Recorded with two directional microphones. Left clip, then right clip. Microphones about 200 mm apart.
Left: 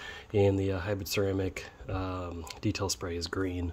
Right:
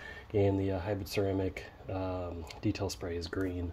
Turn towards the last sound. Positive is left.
turn(degrees=40)  # may be behind; listen again after turning